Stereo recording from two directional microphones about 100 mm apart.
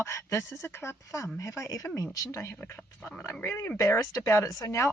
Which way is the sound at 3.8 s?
30° left (ahead or behind).